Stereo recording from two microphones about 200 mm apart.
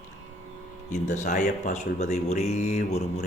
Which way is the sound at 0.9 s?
35° left (ahead or behind).